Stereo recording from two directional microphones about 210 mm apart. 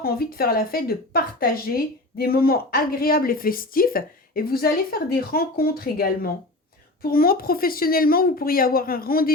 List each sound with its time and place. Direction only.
0.0 s speech: 45° left (ahead or behind)